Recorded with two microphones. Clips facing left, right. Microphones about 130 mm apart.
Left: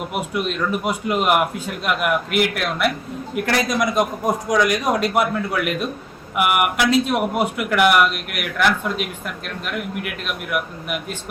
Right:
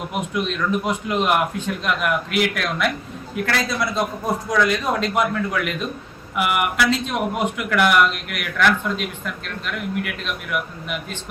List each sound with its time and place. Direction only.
0.1 s a man's voice: 5° left (ahead or behind)
3.4 s a man's voice: 15° left (ahead or behind)
6.4 s speech: 55° left (ahead or behind)
6.9 s a man's voice: 10° left (ahead or behind)